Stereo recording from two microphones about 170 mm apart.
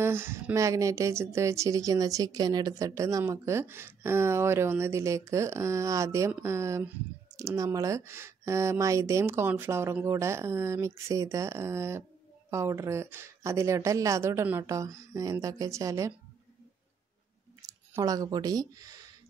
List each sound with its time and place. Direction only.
0.0 s speech: 15° right (ahead or behind)
17.6 s speech: 20° right (ahead or behind)